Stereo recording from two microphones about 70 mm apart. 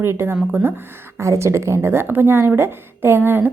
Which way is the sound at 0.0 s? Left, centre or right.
Right.